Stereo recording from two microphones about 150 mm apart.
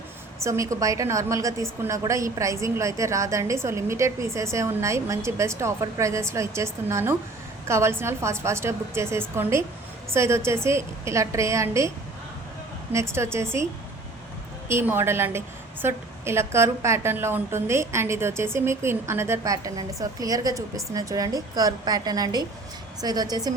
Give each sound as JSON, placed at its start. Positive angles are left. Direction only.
{"t": 0.4, "sound": "a woman's voice", "side_deg": -20}
{"t": 12.9, "sound": "a woman's voice", "side_deg": -20}
{"t": 14.7, "sound": "a woman's voice", "side_deg": -15}